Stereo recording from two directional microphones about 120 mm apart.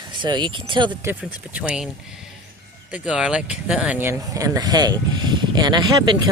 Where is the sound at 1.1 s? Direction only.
20° right (ahead or behind).